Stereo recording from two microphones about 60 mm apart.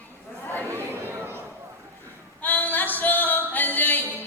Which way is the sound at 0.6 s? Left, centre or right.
Right.